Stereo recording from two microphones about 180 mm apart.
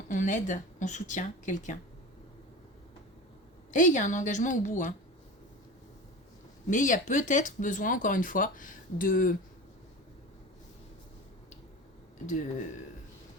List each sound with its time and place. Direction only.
0.1 s speech: 45° left (ahead or behind)
3.7 s speech: 45° left (ahead or behind)
6.7 s speech: 45° left (ahead or behind)